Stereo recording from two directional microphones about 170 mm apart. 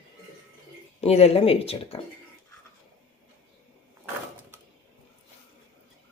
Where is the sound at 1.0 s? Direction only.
35° left (ahead or behind).